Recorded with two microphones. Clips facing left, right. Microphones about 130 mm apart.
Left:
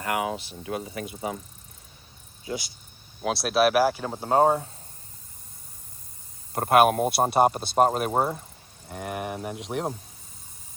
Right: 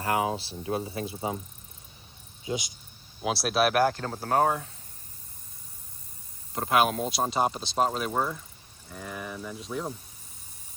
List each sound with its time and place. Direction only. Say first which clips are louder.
0.1 s speech: right 1 dB; 30° right (ahead or behind)
2.5 s speech: right 1 dB; 20° right (ahead or behind)
3.2 s speech: left 3 dB; centre (ahead or behind); by 4.7 s 30° left (ahead or behind)
6.5 s speech: left 5 dB; 55° left (ahead or behind)
8.1 s speech: left 4 dB; 35° left (ahead or behind)
8.9 s speech: left 6 dB; 70° left (ahead or behind)